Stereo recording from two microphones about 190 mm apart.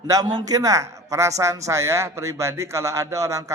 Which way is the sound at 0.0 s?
20° right (ahead or behind).